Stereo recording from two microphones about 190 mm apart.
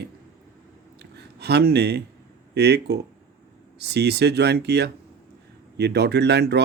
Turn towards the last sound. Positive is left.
turn(degrees=-60)  # may be behind; listen again after turning